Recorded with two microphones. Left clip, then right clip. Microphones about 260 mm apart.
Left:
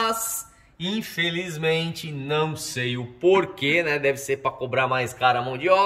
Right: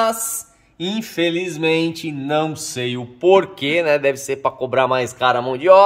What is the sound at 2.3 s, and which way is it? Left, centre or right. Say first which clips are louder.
Speech: right 5 dB; centre.